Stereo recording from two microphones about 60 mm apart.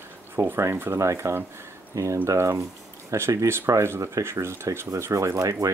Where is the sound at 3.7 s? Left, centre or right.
Right.